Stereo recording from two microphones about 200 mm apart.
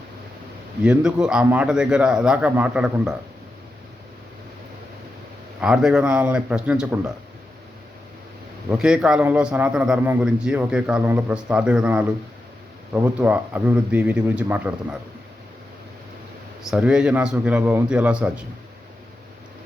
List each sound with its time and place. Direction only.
0.9 s a man's voice: 5° right (ahead or behind)
5.5 s a man's voice: 5° right (ahead or behind)
8.8 s a man's voice: 5° right (ahead or behind)
16.6 s a man's voice: 5° right (ahead or behind)